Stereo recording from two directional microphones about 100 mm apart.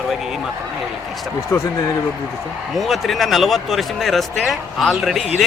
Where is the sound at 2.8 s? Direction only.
Centre (ahead or behind).